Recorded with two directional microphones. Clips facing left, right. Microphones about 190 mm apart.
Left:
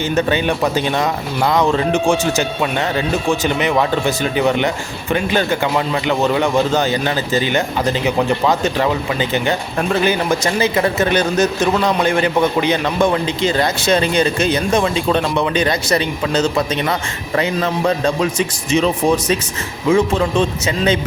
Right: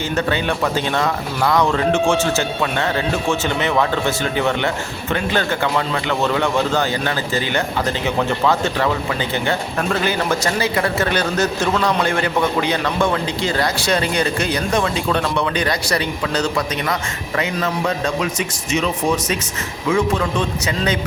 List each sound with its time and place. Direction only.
0.1 s speech: 20° left (ahead or behind)